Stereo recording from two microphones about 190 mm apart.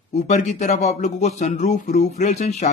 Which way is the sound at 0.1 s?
35° left (ahead or behind).